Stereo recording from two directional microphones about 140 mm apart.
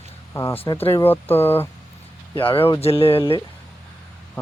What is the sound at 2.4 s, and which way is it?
Speech, 40° left (ahead or behind).